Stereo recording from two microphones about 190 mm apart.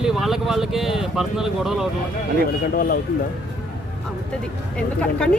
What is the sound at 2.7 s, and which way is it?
Speech, 50° left (ahead or behind).